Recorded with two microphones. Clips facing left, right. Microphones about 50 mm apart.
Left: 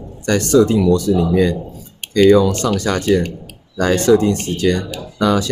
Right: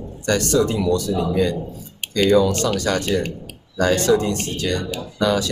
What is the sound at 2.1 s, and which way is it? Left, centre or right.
Speech, left.